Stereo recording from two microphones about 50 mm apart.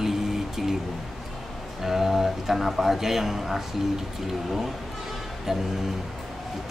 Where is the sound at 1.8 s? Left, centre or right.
Centre.